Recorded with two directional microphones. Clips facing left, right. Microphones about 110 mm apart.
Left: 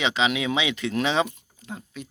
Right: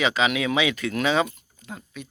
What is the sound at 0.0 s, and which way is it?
Speech, 25° left (ahead or behind).